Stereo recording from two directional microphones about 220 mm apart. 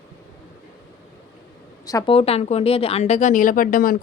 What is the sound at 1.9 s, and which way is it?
Speech, 20° left (ahead or behind).